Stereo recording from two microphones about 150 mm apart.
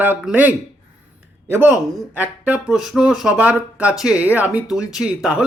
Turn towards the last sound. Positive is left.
turn(degrees=-5)  # may be behind; listen again after turning